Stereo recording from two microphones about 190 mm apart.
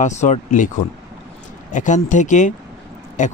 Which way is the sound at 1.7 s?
40° left (ahead or behind).